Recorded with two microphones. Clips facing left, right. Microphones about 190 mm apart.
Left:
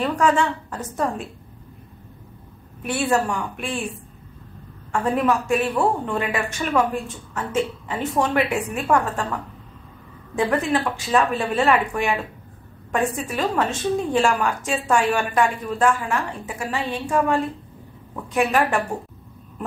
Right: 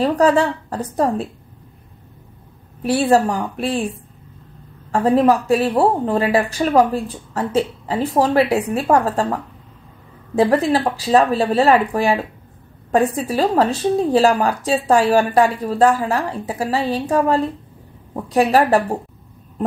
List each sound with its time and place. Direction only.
0.0 s a woman's voice: 35° right (ahead or behind)
2.8 s a woman's voice: 35° right (ahead or behind)